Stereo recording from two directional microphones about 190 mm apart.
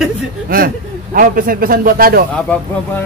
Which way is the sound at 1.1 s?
50° right (ahead or behind).